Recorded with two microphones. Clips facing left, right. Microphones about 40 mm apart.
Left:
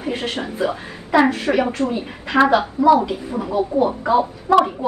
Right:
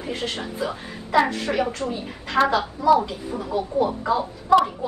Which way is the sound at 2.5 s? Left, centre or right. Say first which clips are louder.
Left 4 dB; left.